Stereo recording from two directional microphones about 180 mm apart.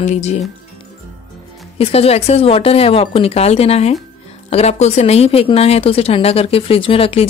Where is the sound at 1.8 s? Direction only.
35° left (ahead or behind).